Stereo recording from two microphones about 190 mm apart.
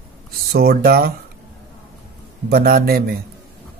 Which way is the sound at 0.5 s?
55° right (ahead or behind).